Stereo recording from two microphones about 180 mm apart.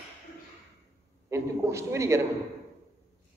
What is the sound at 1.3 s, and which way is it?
Speech, 15° right (ahead or behind).